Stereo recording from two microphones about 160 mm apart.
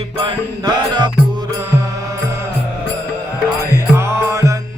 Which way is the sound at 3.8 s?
15° right (ahead or behind).